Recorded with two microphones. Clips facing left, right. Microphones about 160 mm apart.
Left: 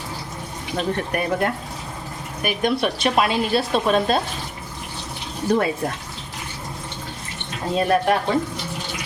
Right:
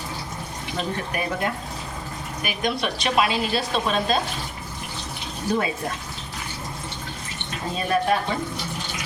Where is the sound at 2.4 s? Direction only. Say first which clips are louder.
Left 5 dB; 55° left (ahead or behind).